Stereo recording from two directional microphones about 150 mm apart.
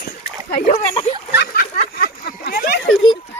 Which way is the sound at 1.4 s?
75° left (ahead or behind).